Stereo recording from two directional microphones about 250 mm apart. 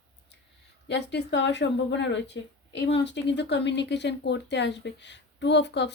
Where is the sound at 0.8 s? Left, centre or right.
Left.